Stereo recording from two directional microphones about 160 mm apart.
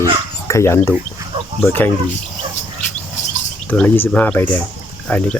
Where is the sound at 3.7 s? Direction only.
10° left (ahead or behind).